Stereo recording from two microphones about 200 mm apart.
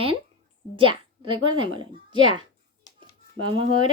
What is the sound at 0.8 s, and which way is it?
Speech, 25° right (ahead or behind).